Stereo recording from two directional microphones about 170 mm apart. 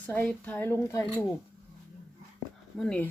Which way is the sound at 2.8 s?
5° left (ahead or behind).